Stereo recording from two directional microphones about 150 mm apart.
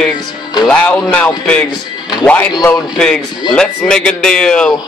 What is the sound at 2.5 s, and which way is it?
Speech, 25° left (ahead or behind).